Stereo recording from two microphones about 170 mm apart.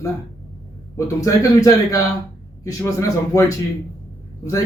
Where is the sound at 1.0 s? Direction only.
20° left (ahead or behind).